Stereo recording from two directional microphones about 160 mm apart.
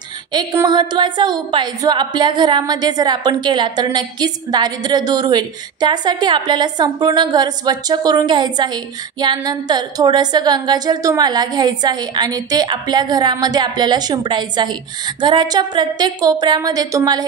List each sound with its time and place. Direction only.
0.3 s a woman's voice: 25° right (ahead or behind)